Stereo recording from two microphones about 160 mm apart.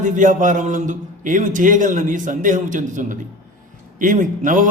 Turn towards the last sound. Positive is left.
turn(degrees=-55)  # may be behind; listen again after turning